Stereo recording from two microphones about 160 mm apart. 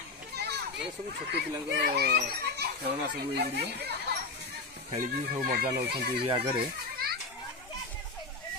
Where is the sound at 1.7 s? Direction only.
85° right.